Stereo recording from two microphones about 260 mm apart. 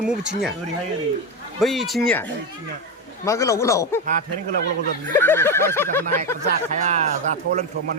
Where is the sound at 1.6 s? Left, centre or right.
Centre.